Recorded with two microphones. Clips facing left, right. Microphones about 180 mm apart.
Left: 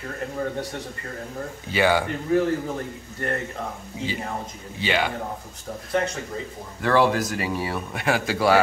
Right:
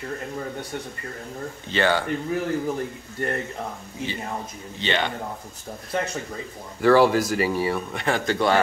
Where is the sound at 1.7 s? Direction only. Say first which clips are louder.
Left 2 dB; 10° left (ahead or behind).